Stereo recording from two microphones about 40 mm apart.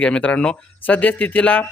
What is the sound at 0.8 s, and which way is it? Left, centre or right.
Speech, left.